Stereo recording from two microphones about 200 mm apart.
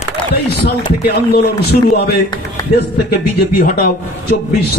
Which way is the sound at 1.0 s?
50° left (ahead or behind).